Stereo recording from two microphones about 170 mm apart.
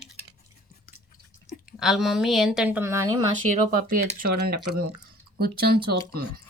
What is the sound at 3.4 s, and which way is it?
Speech, 55° right (ahead or behind).